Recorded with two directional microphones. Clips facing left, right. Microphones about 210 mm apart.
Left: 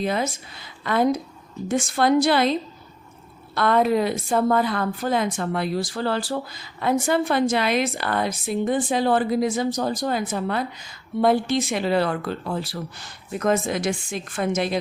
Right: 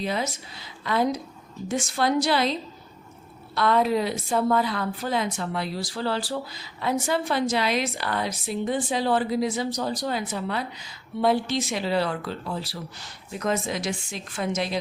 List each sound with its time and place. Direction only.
0.0 s a woman's voice: 50° left (ahead or behind)